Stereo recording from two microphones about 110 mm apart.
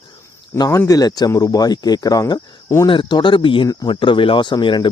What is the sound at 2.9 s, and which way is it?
Speech, 45° left (ahead or behind).